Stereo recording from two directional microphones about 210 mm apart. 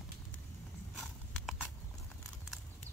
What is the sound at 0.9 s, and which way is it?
Clip-clop, centre (ahead or behind).